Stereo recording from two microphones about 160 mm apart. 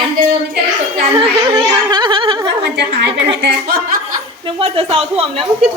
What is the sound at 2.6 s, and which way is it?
Speech, 90° right.